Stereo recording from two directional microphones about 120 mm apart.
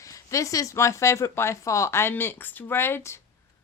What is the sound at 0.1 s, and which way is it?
Speech, 25° left (ahead or behind).